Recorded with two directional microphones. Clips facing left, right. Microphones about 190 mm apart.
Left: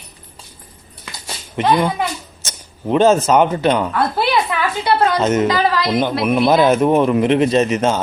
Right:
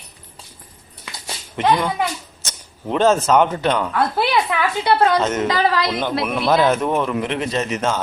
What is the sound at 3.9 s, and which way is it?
Speech, 15° right (ahead or behind).